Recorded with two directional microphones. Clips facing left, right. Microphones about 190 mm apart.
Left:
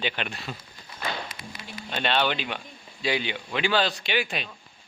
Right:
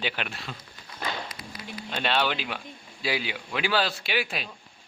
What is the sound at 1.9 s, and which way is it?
Speech, 5° right (ahead or behind).